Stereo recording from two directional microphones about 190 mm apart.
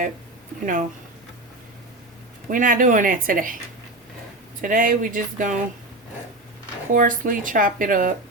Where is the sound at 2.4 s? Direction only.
45° right (ahead or behind).